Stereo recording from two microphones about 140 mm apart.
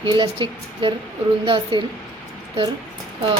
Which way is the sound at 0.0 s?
35° right (ahead or behind).